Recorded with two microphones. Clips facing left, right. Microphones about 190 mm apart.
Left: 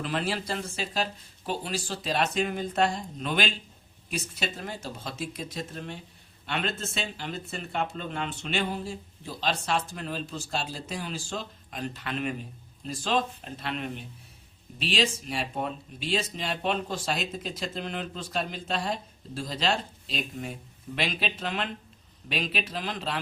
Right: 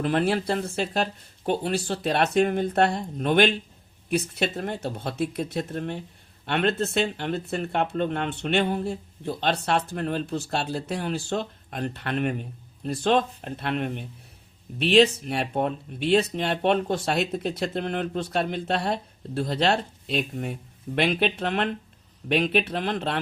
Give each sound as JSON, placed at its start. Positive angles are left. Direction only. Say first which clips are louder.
{"t": 0.0, "sound": "speech", "louder": "right 7 dB", "side_deg": -55}